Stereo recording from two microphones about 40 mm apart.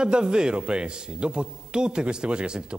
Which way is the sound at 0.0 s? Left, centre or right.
Right.